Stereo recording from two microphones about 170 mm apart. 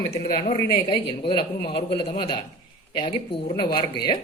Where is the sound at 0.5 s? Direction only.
25° left (ahead or behind).